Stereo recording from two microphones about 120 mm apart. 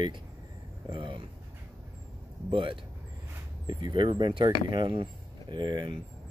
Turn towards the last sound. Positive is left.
turn(degrees=-40)  # may be behind; listen again after turning